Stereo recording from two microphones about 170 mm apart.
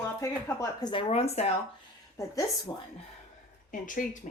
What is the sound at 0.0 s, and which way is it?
Speech, 15° left (ahead or behind).